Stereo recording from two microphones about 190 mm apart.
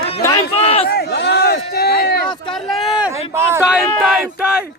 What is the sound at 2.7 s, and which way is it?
Speech, centre (ahead or behind).